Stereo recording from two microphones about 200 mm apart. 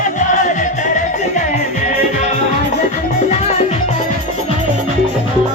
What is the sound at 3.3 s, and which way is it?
Music, 35° left (ahead or behind).